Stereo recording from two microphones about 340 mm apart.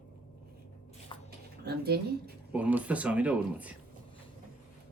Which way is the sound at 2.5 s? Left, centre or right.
Centre.